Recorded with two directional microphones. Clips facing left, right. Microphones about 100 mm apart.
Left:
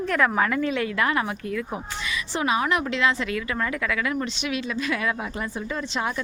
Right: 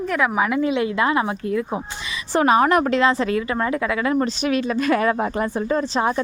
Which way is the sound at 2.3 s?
45° right (ahead or behind).